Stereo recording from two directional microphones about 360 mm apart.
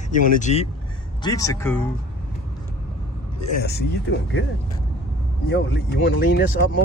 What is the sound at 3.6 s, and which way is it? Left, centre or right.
Speech, left.